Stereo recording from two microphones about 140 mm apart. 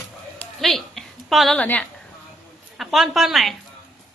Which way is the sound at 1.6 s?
10° left (ahead or behind).